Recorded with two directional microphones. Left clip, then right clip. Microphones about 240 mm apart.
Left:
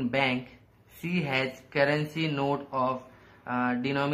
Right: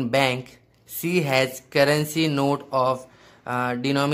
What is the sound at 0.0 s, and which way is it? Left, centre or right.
Speech, right.